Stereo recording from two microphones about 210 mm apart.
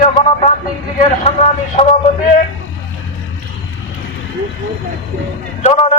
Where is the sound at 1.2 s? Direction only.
30° left (ahead or behind).